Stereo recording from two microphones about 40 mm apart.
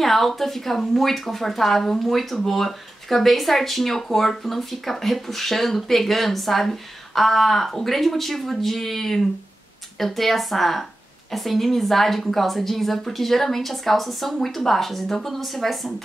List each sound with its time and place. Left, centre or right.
0.0 s speech: centre